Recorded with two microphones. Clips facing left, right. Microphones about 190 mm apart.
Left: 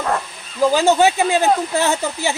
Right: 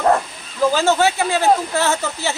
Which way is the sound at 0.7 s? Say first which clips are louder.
Left 2 dB; 15° left (ahead or behind).